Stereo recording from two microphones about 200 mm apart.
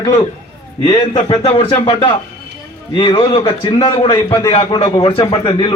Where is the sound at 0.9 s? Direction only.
30° left (ahead or behind).